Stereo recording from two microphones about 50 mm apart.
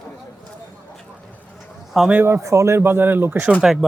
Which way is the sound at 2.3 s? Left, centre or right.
Right.